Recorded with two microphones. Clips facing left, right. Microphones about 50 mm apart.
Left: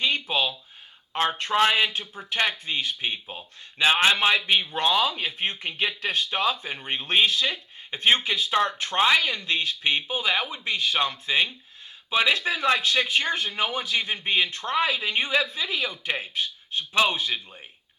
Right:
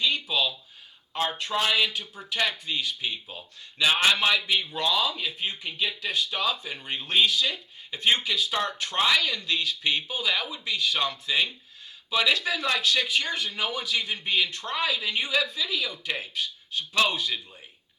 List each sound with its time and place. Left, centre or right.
0.0 s a sound: left
1.1 s speech: left
4.4 s speech: left